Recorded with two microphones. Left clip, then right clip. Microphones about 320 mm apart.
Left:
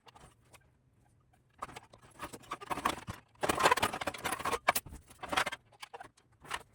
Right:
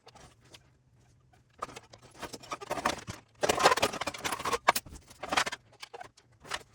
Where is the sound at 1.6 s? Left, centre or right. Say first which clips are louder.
Right 4 dB; centre.